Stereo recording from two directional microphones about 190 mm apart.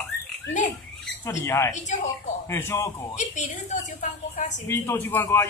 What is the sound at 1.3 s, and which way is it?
Speech, 15° left (ahead or behind).